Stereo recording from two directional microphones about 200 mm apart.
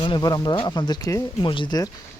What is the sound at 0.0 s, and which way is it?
Speech, 20° left (ahead or behind).